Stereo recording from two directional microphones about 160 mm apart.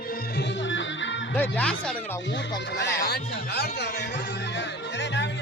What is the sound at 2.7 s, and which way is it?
Music, 90° left.